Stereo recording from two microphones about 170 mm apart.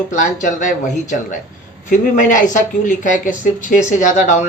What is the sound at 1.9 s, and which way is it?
Speech, 50° left (ahead or behind).